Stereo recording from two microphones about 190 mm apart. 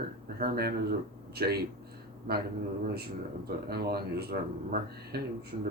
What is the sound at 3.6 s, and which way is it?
Speech, 55° right (ahead or behind).